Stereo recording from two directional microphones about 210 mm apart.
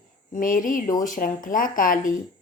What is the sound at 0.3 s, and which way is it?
A woman's voice, 40° left (ahead or behind).